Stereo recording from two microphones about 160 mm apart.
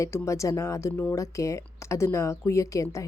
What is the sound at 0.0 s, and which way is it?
Speech, 20° left (ahead or behind).